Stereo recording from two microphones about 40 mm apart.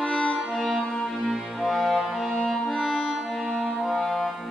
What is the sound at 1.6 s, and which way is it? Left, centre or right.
Music, centre.